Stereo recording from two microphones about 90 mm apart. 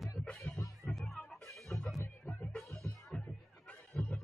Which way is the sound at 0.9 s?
Centre (ahead or behind).